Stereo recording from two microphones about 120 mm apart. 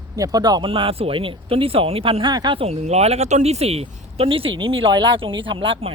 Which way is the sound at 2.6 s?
65° right (ahead or behind).